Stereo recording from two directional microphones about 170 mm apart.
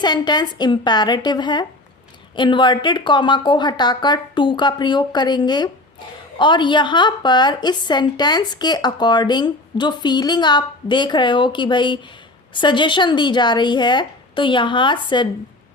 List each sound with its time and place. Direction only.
0.0 s a woman's voice: 25° left (ahead or behind)